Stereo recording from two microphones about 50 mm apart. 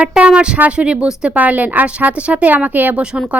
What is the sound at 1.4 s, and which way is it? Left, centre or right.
Speech, right.